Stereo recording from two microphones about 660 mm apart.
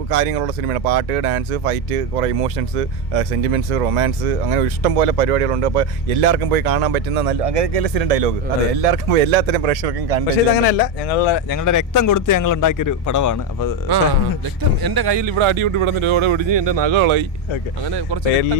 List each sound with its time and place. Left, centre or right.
0.1 s speech: right
10.5 s speech: left
14.8 s speech: right